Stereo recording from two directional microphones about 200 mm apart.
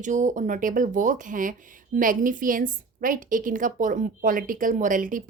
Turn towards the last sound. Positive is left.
turn(degrees=-40)  # may be behind; listen again after turning